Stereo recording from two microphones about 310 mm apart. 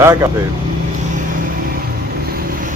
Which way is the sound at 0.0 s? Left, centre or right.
Centre.